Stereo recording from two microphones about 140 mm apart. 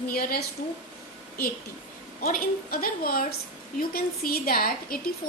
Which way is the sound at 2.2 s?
90° left.